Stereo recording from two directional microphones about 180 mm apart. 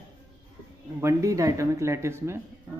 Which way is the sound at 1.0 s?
15° right (ahead or behind).